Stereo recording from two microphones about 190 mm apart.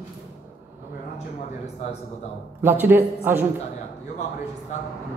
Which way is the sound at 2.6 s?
10° right (ahead or behind).